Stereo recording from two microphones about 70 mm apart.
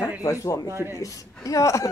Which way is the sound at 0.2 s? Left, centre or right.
Left.